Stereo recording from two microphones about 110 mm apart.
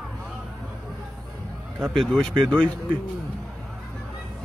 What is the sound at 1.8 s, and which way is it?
Speech, 5° left (ahead or behind).